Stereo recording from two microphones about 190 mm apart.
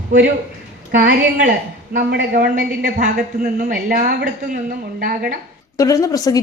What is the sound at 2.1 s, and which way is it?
A woman's voice, 60° right (ahead or behind).